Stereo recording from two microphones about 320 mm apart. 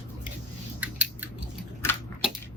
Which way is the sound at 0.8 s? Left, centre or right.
Centre.